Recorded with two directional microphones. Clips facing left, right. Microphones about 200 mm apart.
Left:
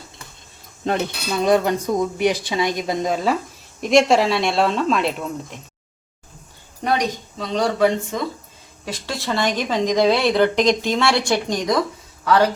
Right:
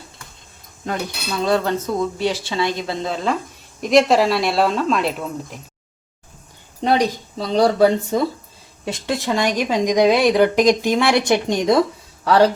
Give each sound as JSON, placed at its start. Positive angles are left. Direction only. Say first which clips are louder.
{"t": 0.9, "sound": "speech", "louder": "left 3 dB", "side_deg": 20}
{"t": 3.8, "sound": "speech", "louder": "right 1 dB", "side_deg": 0}
{"t": 6.8, "sound": "speech", "louder": "right 4 dB", "side_deg": -30}
{"t": 8.8, "sound": "a woman's voice", "louder": "right 5 dB", "side_deg": -20}